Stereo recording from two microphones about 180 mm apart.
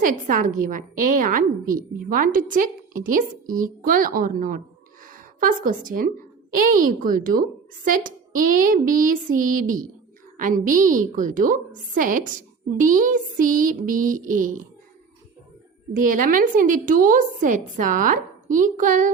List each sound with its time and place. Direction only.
0.0 s a woman's voice: 45° right (ahead or behind)
15.9 s a woman's voice: 50° right (ahead or behind)